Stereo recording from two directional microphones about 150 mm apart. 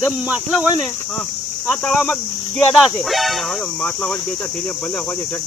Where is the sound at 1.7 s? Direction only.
5° left (ahead or behind).